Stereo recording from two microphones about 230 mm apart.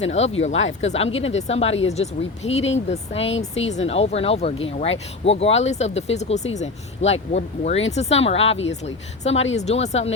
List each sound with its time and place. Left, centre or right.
0.0 s speech: left